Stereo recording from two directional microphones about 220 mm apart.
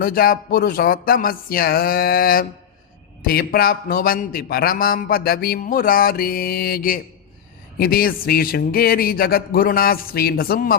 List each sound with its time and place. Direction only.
0.0 s a man's voice: 40° left (ahead or behind)